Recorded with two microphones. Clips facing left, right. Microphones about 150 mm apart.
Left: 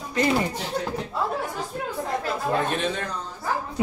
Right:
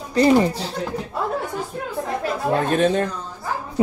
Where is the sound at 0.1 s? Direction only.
35° right (ahead or behind).